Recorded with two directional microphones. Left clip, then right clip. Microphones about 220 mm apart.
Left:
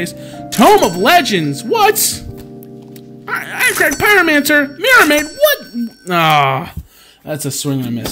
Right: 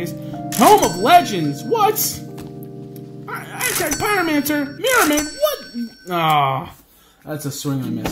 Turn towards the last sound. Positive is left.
turn(degrees=45)  # may be behind; listen again after turning